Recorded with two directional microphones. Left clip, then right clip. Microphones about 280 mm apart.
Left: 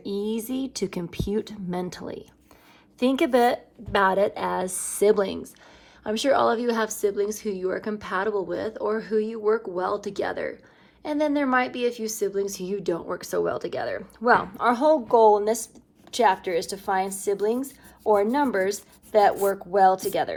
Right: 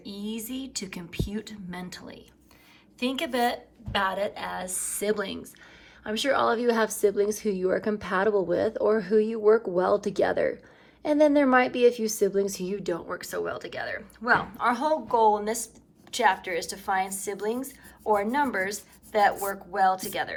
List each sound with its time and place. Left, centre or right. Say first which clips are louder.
0.3 s speech: left 7 dB; left
3.9 s a woman's voice: left 6 dB; left